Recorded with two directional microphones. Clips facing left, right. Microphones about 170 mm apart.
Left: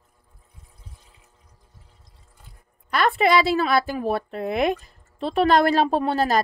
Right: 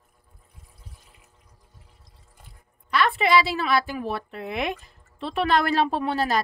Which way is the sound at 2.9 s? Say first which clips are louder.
Left 2 dB; 45° left (ahead or behind).